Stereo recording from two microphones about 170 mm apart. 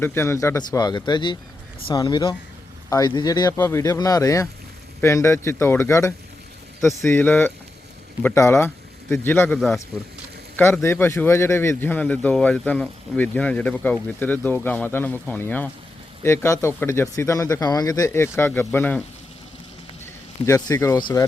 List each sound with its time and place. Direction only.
0.0 s speech: 15° left (ahead or behind)
9.6 s speech: centre (ahead or behind)
10.6 s speech: 15° left (ahead or behind)
20.4 s speech: 20° left (ahead or behind)